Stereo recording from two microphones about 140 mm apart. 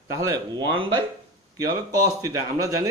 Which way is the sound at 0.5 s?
35° right (ahead or behind).